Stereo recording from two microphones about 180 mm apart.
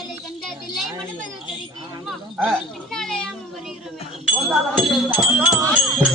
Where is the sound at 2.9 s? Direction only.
5° left (ahead or behind).